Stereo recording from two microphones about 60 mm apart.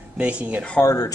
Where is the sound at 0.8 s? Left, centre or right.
Left.